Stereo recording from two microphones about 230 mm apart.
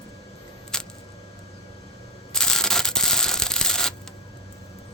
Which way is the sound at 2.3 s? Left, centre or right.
Centre.